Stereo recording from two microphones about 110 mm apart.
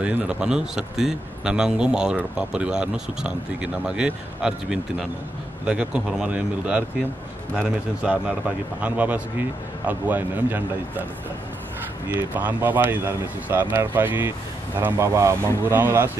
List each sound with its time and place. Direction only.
0.0 s speech: 10° right (ahead or behind)
12.1 s speech: 15° right (ahead or behind)